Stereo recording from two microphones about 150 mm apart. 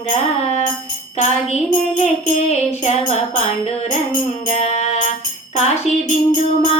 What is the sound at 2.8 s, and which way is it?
Music, 45° left (ahead or behind).